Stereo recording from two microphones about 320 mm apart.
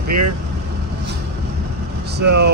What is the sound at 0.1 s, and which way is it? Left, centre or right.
Speech, right.